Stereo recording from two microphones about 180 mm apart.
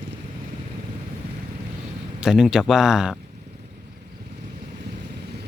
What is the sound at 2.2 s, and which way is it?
Speech, 5° right (ahead or behind).